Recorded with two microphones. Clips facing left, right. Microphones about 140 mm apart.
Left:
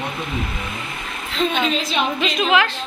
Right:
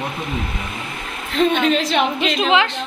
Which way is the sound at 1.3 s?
60° right (ahead or behind).